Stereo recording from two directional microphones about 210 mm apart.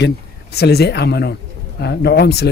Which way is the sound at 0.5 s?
50° left (ahead or behind).